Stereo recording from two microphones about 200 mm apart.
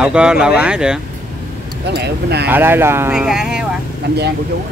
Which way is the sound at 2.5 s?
10° right (ahead or behind).